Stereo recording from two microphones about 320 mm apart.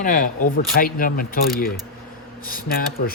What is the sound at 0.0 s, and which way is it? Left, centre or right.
Speech, left.